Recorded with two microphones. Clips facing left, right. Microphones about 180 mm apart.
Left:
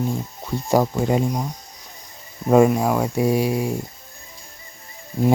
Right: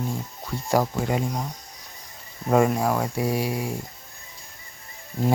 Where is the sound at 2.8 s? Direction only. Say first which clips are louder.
Left 4 dB; 15° left (ahead or behind).